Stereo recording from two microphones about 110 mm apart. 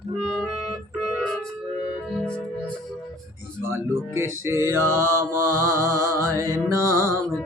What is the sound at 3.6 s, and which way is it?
Music, 20° right (ahead or behind).